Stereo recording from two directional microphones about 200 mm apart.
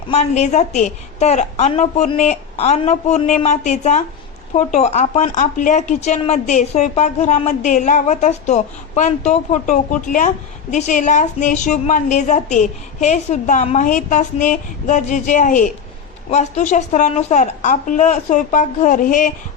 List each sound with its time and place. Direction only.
0.1 s speech: 35° left (ahead or behind)